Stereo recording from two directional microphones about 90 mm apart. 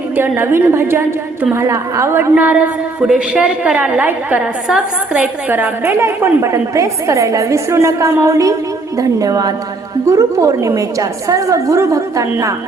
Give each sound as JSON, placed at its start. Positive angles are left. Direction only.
{"t": 0.2, "sound": "a woman's voice", "side_deg": -25}
{"t": 2.3, "sound": "a woman's voice", "side_deg": -15}